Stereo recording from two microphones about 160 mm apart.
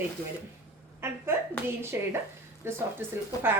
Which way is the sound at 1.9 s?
15° right (ahead or behind).